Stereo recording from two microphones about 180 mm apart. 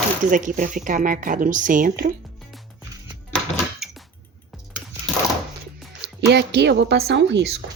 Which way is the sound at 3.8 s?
Centre (ahead or behind).